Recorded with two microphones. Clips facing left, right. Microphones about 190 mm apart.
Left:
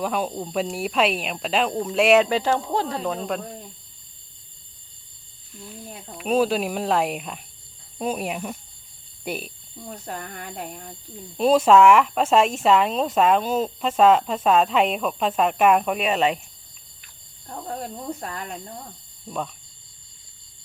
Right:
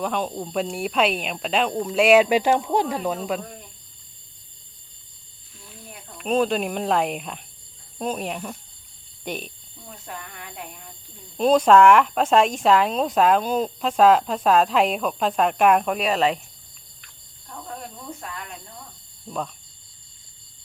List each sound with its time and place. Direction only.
0.0 s speech: 5° left (ahead or behind)
2.3 s speech: 15° right (ahead or behind)
6.1 s speech: 5° left (ahead or behind)
9.9 s speech: 40° left (ahead or behind)
11.3 s speech: 5° left (ahead or behind)
18.2 s speech: 40° left (ahead or behind)